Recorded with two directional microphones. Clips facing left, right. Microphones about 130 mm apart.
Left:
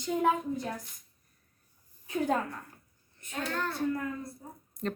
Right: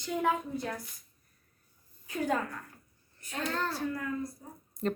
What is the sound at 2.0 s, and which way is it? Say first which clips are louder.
Speech: left 2 dB; 25° left (ahead or behind).